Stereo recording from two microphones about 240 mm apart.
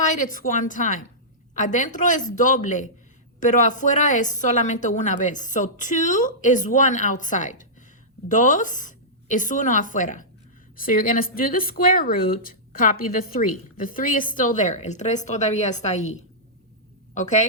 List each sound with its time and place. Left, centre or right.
0.0 s a woman's voice: left